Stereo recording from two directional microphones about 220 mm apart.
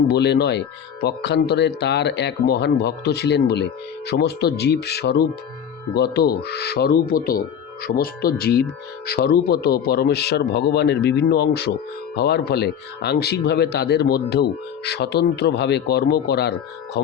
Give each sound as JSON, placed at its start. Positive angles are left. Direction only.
{"t": 0.1, "sound": "speech", "side_deg": 50}